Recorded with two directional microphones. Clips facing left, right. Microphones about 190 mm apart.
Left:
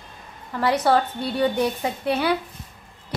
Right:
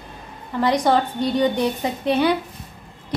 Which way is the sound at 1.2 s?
10° left (ahead or behind).